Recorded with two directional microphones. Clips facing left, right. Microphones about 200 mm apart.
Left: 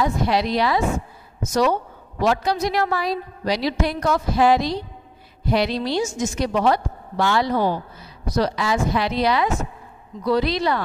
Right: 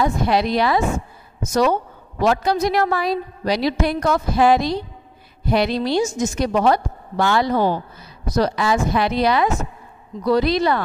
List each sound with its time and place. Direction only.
0.0 s a woman's voice: 55° right (ahead or behind)